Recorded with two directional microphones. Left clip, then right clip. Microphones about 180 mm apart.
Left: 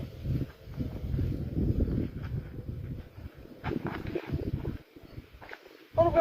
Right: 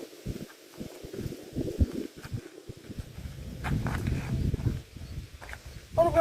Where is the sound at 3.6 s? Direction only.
20° right (ahead or behind).